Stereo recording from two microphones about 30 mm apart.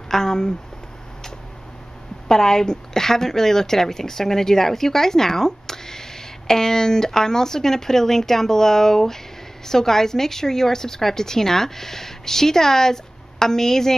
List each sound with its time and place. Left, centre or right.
0.1 s speech: left
2.2 s a woman's voice: centre